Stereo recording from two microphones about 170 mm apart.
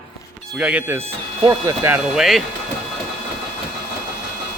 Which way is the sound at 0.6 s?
10° right (ahead or behind).